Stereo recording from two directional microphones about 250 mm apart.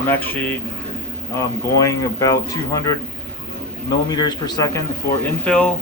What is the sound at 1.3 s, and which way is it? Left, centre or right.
Speech, centre.